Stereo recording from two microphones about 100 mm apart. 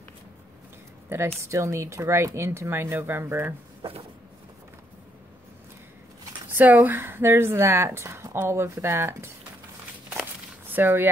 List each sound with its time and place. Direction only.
1.0 s a woman's voice: 25° right (ahead or behind)
6.6 s a woman's voice: 20° right (ahead or behind)
10.7 s speech: 20° right (ahead or behind)